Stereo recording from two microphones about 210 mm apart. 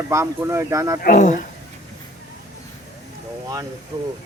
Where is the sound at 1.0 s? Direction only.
35° left (ahead or behind).